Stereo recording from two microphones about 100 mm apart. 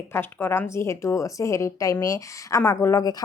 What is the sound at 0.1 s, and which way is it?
A woman's voice, 20° left (ahead or behind).